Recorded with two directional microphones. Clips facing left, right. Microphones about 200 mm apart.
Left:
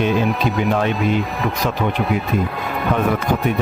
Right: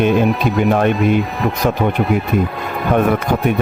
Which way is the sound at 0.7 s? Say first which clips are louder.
Right 5 dB; 55° right (ahead or behind).